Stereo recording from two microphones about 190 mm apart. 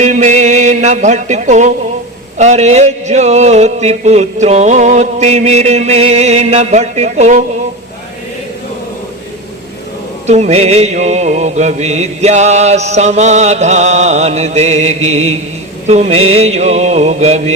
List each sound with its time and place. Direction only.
0.0 s music: 40° right (ahead or behind)
2.4 s mantra: 35° right (ahead or behind)
10.2 s mantra: 35° right (ahead or behind)